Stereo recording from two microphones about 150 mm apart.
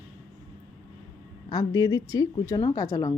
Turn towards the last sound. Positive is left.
turn(degrees=20)  # may be behind; listen again after turning